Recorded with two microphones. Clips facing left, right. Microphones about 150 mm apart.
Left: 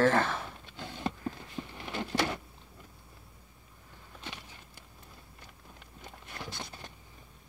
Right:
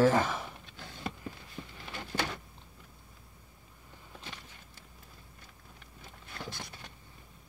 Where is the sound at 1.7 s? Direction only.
65° left (ahead or behind).